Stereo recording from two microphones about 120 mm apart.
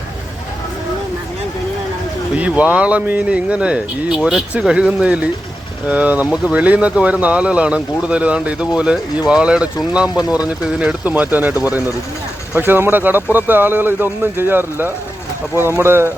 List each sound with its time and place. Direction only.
2.4 s speech: 10° right (ahead or behind)
12.5 s speech: 15° right (ahead or behind)